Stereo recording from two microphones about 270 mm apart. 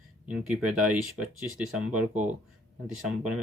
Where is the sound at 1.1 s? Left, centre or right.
Centre.